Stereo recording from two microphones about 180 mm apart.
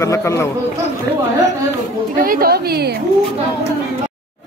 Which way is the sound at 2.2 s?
50° right (ahead or behind).